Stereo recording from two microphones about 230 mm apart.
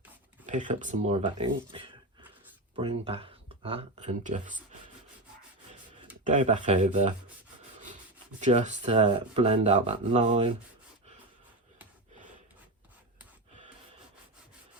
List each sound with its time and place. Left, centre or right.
0.4 s speech: right
6.2 s speech: right
8.4 s speech: right